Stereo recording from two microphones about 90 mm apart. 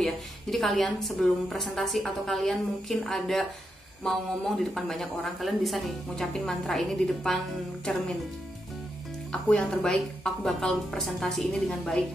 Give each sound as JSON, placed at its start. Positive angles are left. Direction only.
{"t": 0.0, "sound": "a woman's voice", "side_deg": 0}
{"t": 9.3, "sound": "a woman's voice", "side_deg": 5}